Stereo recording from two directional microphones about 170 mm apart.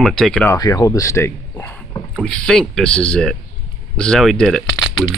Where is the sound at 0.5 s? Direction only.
20° left (ahead or behind).